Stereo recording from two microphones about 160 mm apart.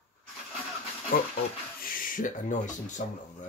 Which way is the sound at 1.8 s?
60° left (ahead or behind).